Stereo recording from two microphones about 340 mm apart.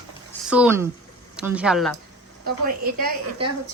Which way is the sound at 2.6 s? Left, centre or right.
Right.